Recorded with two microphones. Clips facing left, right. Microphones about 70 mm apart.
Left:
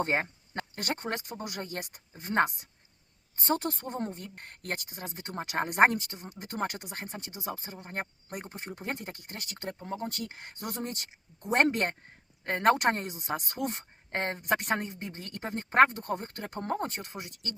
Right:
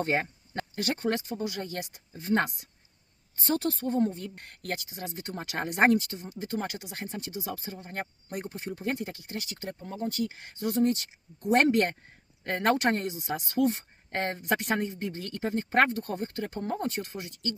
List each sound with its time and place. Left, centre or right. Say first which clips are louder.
0.0 s speech: right 1 dB; left
5.8 s speech: right 1 dB; left
6.2 s speech: right 1 dB; left
6.9 s speech: right 4 dB; left
13.1 s speech: right 1 dB; left
13.7 s a sound: right 7 dB; left
14.2 s speech: right 2 dB; left
14.6 s speech: right 2 dB; left
16.3 s speech: right 1 dB; left
16.7 s speech: right 2 dB; left